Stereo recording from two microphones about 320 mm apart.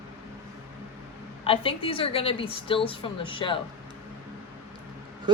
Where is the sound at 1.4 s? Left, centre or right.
Centre.